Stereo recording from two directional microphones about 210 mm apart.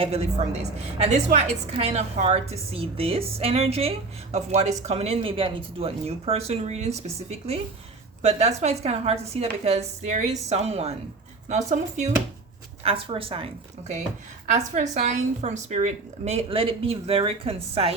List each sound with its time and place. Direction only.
0.0 s a woman's voice: 30° right (ahead or behind)